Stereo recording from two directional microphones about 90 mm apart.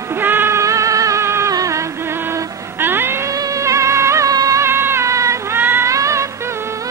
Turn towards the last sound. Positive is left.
turn(degrees=-35)  # may be behind; listen again after turning